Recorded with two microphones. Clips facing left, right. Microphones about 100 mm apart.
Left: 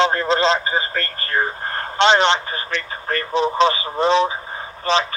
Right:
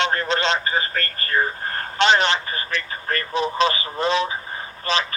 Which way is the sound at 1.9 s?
25° left (ahead or behind).